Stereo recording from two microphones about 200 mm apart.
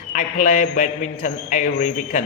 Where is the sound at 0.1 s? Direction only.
40° left (ahead or behind).